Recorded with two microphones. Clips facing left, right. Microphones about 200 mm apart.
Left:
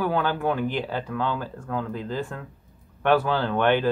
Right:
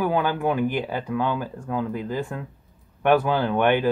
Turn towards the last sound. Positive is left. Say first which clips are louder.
# right 1 dB
turn(degrees=-15)  # may be behind; listen again after turning